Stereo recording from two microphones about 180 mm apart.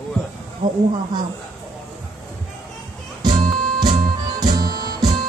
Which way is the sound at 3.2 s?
20° right (ahead or behind).